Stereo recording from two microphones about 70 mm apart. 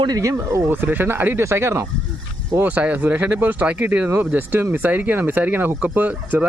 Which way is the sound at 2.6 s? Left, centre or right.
Right.